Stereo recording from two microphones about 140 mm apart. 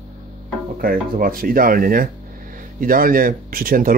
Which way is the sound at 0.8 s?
90° right.